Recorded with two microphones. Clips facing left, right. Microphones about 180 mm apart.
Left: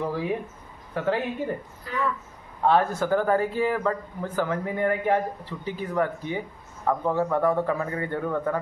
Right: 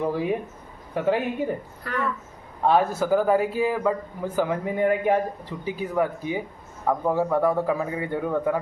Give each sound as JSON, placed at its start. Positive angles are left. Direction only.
{"t": 0.0, "sound": "a man's voice", "side_deg": -15}
{"t": 2.6, "sound": "a man's voice", "side_deg": -10}